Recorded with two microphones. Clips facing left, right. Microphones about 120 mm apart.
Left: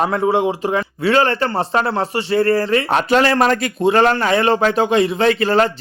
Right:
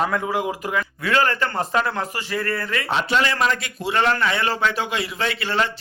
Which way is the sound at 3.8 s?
35° left (ahead or behind).